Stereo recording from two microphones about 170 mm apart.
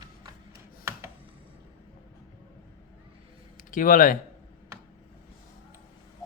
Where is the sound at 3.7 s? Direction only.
50° left (ahead or behind).